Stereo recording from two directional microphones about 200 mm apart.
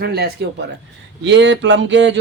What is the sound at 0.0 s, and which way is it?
Speech, 55° right (ahead or behind).